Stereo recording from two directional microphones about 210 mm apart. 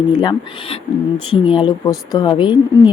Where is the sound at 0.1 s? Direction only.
20° left (ahead or behind).